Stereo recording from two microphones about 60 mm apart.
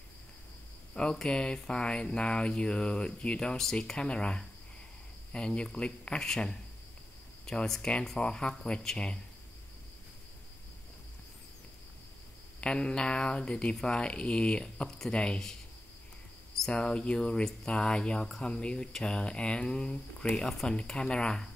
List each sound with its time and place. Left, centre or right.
0.9 s speech: centre
12.5 s speech: centre
16.5 s speech: centre